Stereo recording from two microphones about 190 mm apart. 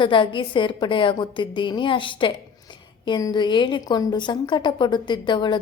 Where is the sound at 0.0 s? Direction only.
25° left (ahead or behind).